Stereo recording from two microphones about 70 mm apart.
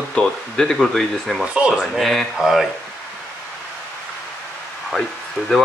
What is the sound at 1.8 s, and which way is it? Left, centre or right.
Speech, centre.